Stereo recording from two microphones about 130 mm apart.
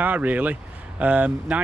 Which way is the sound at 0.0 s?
10° right (ahead or behind).